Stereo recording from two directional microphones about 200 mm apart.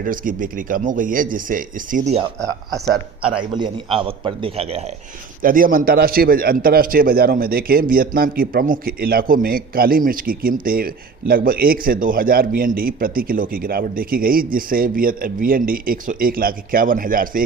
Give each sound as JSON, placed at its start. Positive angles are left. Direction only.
{"t": 0.0, "sound": "speech", "side_deg": -45}
{"t": 3.5, "sound": "a man's voice", "side_deg": -25}
{"t": 5.4, "sound": "speech", "side_deg": -45}